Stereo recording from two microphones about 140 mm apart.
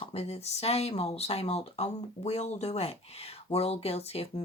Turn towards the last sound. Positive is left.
turn(degrees=45)  # may be behind; listen again after turning